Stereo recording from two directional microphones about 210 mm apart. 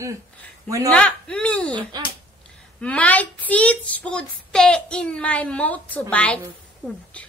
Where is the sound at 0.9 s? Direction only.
5° left (ahead or behind).